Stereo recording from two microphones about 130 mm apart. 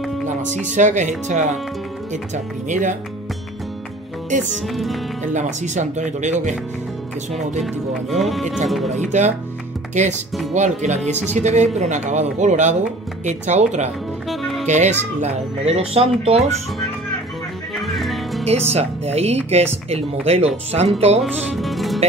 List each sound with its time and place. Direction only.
0.4 s speech: 70° right (ahead or behind)
4.6 s speech: centre (ahead or behind)
5.3 s speech: 65° right (ahead or behind)
7.3 s speech: centre (ahead or behind)
8.9 s speech: 65° right (ahead or behind)
14.2 s music: centre (ahead or behind)
14.7 s speech: 65° right (ahead or behind)
17.8 s music: centre (ahead or behind)
18.4 s speech: 55° right (ahead or behind)
21.2 s music: centre (ahead or behind)